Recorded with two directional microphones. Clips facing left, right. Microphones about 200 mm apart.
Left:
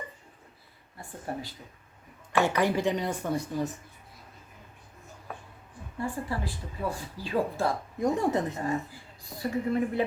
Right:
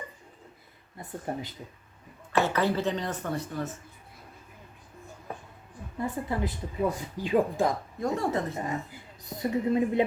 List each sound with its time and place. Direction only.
0.9 s speech: 20° right (ahead or behind)
2.4 s speech: 15° left (ahead or behind)
6.0 s speech: 20° right (ahead or behind)
7.9 s speech: 15° left (ahead or behind)
8.5 s speech: 20° right (ahead or behind)